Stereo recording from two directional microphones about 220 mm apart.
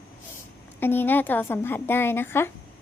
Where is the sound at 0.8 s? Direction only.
10° left (ahead or behind).